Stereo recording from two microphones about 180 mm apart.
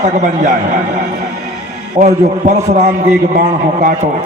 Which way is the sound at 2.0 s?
40° right (ahead or behind).